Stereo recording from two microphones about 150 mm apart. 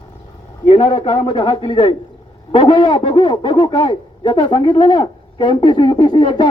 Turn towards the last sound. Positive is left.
turn(degrees=30)  # may be behind; listen again after turning